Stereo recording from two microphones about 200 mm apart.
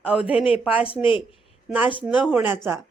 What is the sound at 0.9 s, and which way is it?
Speech, 25° left (ahead or behind).